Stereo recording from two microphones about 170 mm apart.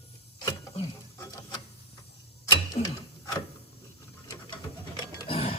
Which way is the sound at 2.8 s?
40° left (ahead or behind).